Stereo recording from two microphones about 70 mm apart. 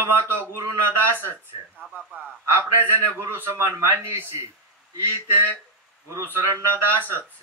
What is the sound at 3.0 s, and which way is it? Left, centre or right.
Speech, right.